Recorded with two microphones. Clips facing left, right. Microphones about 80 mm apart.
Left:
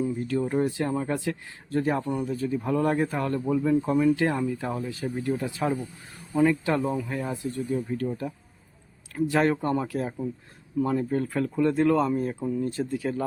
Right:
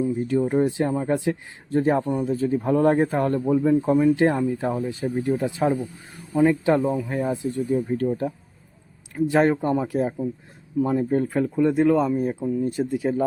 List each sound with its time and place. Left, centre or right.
0.2 s speech: centre
6.8 s speech: centre
7.1 s speech: right
9.3 s speech: right